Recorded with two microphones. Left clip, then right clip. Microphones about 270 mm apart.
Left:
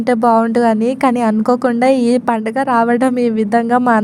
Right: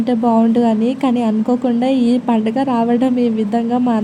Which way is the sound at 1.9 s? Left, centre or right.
Left.